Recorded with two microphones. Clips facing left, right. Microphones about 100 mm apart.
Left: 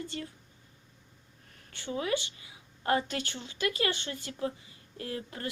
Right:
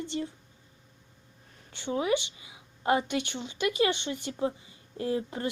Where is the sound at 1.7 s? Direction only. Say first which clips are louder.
Right 4 dB; 20° right (ahead or behind).